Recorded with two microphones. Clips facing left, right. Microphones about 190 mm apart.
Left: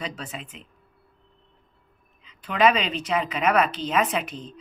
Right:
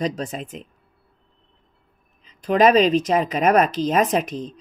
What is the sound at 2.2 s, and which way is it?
A woman's voice, 40° right (ahead or behind).